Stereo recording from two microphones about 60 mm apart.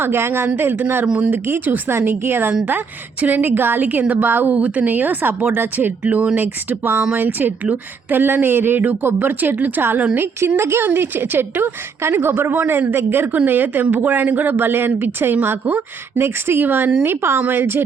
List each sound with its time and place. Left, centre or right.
0.0 s speech: right
1.0 s a woman's voice: centre
1.3 s speech: right
1.9 s a woman's voice: right
6.0 s a woman's voice: right
10.6 s a woman's voice: right
10.8 s speech: right